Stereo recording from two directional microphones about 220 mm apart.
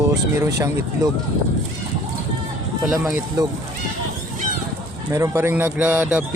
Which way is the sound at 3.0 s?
15° right (ahead or behind).